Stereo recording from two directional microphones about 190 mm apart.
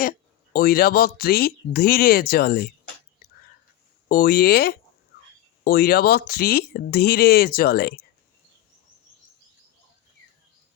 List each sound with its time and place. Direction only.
0.0 s speech: 50° left (ahead or behind)
4.1 s speech: 50° left (ahead or behind)